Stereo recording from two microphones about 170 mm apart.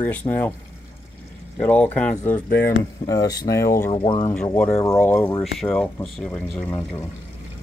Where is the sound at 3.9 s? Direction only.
30° left (ahead or behind).